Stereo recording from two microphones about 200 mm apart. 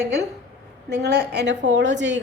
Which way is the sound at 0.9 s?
55° right (ahead or behind).